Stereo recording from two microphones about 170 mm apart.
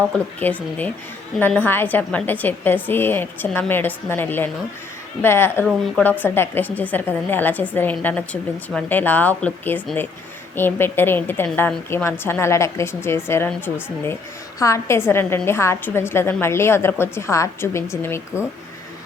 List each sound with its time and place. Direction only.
0.3 s a woman's voice: 10° left (ahead or behind)
14.6 s a woman's voice: 15° left (ahead or behind)